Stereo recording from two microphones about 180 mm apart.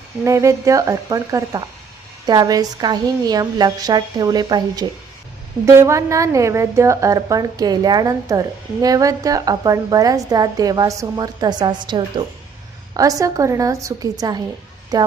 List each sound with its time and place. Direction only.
0.3 s a woman's voice: 15° right (ahead or behind)